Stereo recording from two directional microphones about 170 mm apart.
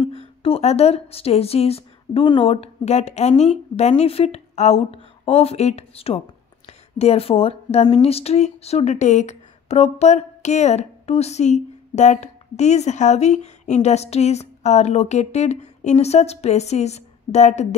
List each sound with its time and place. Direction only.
0.0 s speech: 35° left (ahead or behind)